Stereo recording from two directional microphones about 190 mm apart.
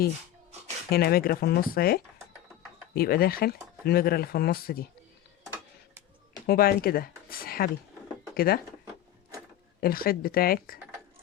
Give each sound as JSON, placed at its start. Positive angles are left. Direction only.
{"t": 0.9, "sound": "speech", "side_deg": 55}
{"t": 6.5, "sound": "speech", "side_deg": 50}
{"t": 9.8, "sound": "speech", "side_deg": 50}